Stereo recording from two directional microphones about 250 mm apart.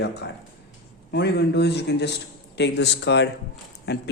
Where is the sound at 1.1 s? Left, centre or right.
Left.